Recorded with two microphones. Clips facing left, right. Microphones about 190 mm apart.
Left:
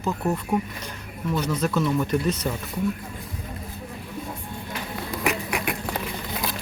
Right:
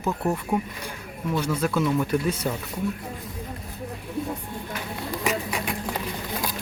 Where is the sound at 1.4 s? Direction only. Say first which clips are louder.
Even; 5° right (ahead or behind).